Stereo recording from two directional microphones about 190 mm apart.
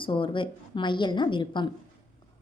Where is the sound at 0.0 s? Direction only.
25° left (ahead or behind).